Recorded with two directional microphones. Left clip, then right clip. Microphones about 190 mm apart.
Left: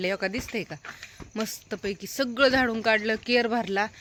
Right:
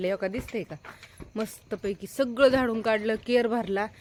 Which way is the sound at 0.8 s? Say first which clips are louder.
Left 4 dB; 55° right (ahead or behind).